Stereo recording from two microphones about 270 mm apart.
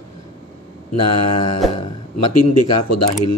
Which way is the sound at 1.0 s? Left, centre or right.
Left.